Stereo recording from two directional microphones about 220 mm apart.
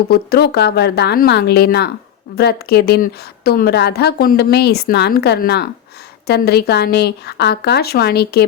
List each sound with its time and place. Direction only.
0.1 s a woman's voice: 45° left (ahead or behind)